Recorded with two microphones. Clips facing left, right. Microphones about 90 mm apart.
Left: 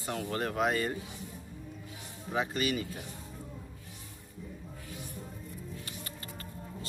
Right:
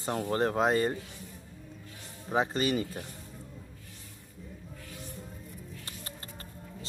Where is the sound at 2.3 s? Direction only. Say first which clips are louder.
Right 3 dB; 35° right (ahead or behind).